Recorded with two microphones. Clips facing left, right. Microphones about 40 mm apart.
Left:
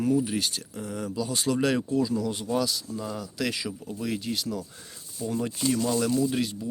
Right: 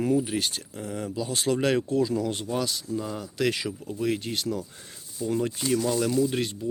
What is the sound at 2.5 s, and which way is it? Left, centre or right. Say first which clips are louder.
Speech: left 1 dB; right.